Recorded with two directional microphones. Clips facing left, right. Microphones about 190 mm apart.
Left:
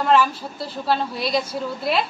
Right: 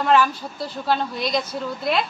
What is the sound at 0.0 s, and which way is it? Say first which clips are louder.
A woman's voice: even; centre (ahead or behind).